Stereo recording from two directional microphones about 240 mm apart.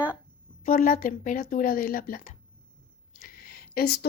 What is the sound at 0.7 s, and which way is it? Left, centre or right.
Speech, left.